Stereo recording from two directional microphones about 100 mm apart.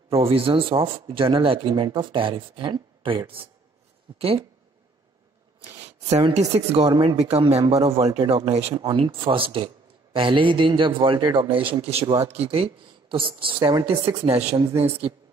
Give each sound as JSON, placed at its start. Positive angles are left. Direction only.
{"t": 0.1, "sound": "a man's voice", "side_deg": -70}
{"t": 4.2, "sound": "speech", "side_deg": -75}
{"t": 6.1, "sound": "speech", "side_deg": -90}
{"t": 7.0, "sound": "speech", "side_deg": -75}
{"t": 8.9, "sound": "a man's voice", "side_deg": -60}